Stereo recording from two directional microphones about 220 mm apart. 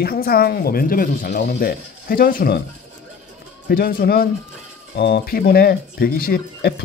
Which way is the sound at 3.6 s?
40° left (ahead or behind).